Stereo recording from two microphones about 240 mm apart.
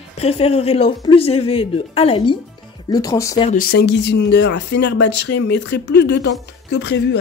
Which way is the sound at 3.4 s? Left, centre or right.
Left.